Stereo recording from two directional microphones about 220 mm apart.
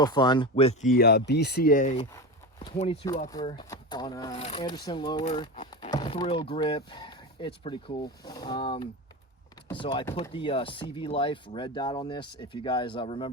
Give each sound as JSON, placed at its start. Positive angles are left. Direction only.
{"t": 0.0, "sound": "speech", "side_deg": 20}
{"t": 2.1, "sound": "a sound", "side_deg": 20}
{"t": 2.8, "sound": "speech", "side_deg": 25}